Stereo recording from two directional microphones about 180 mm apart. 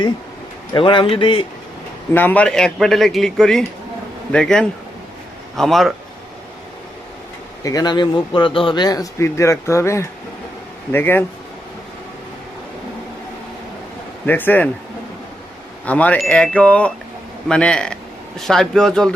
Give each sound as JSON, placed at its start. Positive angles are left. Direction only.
{"t": 0.7, "sound": "speech", "side_deg": 30}
{"t": 2.1, "sound": "a man's voice", "side_deg": 10}
{"t": 7.6, "sound": "speech", "side_deg": 20}
{"t": 10.9, "sound": "chime", "side_deg": 10}
{"t": 14.3, "sound": "chime", "side_deg": 10}
{"t": 15.9, "sound": "chime", "side_deg": 10}
{"t": 17.5, "sound": "a man's voice", "side_deg": 5}